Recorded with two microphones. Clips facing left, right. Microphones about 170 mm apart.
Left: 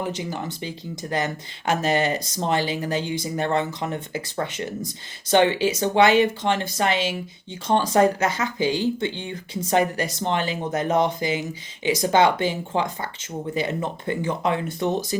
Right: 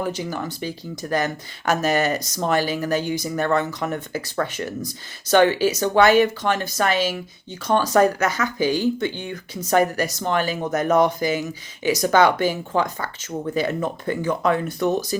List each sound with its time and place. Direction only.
0.0 s speech: 20° left (ahead or behind)